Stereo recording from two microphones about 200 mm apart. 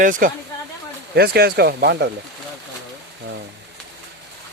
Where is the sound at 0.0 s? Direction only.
40° right (ahead or behind).